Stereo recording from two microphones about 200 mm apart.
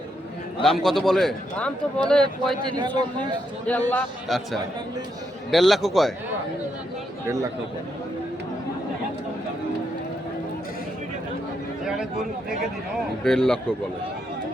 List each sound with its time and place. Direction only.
0.6 s a man's voice: centre (ahead or behind)
2.6 s a man's voice: 20° right (ahead or behind)
3.7 s a man's voice: 10° left (ahead or behind)
5.5 s a man's voice: centre (ahead or behind)
7.3 s a man's voice: 15° right (ahead or behind)
13.2 s a man's voice: centre (ahead or behind)